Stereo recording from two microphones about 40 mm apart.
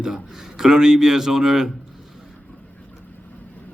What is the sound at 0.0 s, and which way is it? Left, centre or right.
A man's voice, centre.